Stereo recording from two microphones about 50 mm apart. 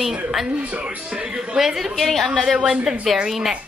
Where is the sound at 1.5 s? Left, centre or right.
Centre.